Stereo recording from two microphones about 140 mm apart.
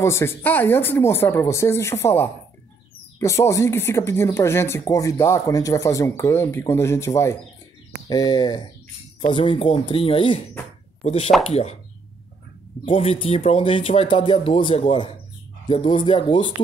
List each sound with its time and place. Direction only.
0.0 s speech: 20° left (ahead or behind)
9.3 s speech: 40° left (ahead or behind)
11.0 s speech: 50° left (ahead or behind)
12.8 s speech: 40° left (ahead or behind)